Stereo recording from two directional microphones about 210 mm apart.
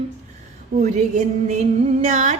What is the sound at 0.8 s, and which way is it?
Speech, 35° right (ahead or behind).